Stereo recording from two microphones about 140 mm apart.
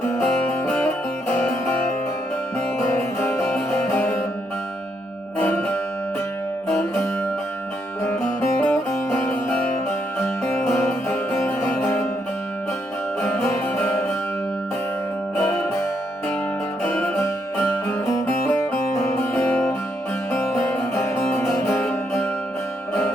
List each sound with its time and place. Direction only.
0.2 s music: 10° left (ahead or behind)
3.2 s music: 15° left (ahead or behind)
5.4 s music: 15° left (ahead or behind)
8.0 s music: 15° left (ahead or behind)
13.2 s music: 15° left (ahead or behind)
15.4 s music: 20° left (ahead or behind)
16.8 s music: 15° left (ahead or behind)